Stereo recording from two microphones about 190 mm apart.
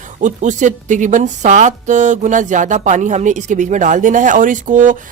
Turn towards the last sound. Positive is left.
turn(degrees=-45)  # may be behind; listen again after turning